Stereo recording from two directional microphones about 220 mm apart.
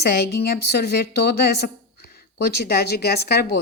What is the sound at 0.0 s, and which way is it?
A woman's voice, 45° left (ahead or behind).